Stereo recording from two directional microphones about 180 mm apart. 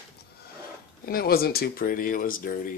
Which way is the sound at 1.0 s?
55° left (ahead or behind).